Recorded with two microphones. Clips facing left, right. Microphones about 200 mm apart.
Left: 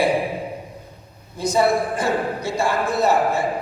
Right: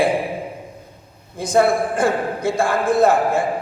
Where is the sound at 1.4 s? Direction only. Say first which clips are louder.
Right 2 dB; 50° right (ahead or behind).